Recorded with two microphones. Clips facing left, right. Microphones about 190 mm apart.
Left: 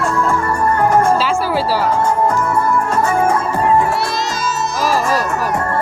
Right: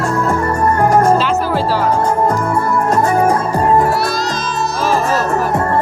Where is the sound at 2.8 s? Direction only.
40° right (ahead or behind).